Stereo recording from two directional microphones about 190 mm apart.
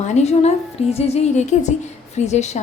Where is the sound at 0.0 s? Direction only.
35° left (ahead or behind).